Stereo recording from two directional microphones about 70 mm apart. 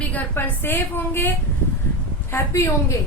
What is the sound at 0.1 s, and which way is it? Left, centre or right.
A woman's voice, left.